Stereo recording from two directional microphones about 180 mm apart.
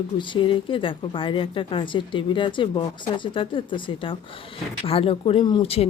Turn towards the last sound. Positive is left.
turn(degrees=35)  # may be behind; listen again after turning